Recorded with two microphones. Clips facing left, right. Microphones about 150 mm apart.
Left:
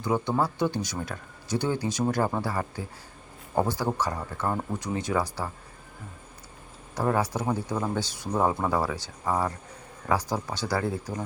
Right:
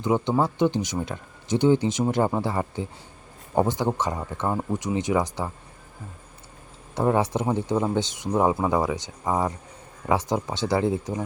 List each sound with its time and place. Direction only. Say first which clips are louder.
0.0 s speech: right 3 dB; 20° right (ahead or behind)
6.9 s speech: right 4 dB; 25° right (ahead or behind)